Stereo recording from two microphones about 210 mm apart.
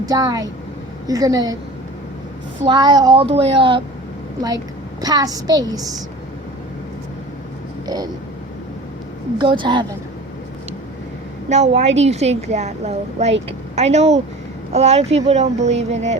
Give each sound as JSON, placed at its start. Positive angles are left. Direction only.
{"t": 0.0, "sound": "a woman's voice", "side_deg": -15}
{"t": 2.6, "sound": "a woman's voice", "side_deg": -20}
{"t": 9.4, "sound": "speech", "side_deg": -20}
{"t": 11.4, "sound": "a woman's voice", "side_deg": -35}